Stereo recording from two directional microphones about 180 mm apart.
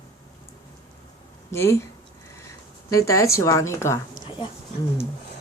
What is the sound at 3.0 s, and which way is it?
A woman's voice, 15° left (ahead or behind).